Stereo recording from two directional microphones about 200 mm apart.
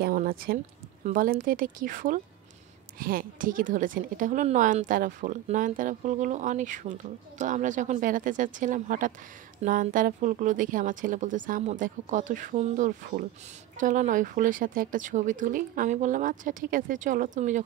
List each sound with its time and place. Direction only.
0.0 s a woman's voice: 45° right (ahead or behind)